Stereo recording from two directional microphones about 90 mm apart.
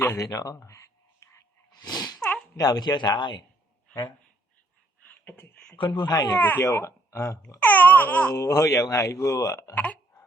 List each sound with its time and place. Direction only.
0.2 s a sound: 35° left (ahead or behind)
1.8 s a sound: 50° left (ahead or behind)
2.6 s speech: 45° left (ahead or behind)
5.7 s speech: 60° left (ahead or behind)
6.4 s speech: 25° left (ahead or behind)
7.6 s baby cry: 20° left (ahead or behind)
8.4 s speech: 40° left (ahead or behind)
9.7 s speech: 15° left (ahead or behind)